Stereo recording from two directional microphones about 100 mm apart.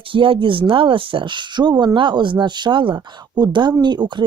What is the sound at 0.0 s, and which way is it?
Speech, 60° right (ahead or behind).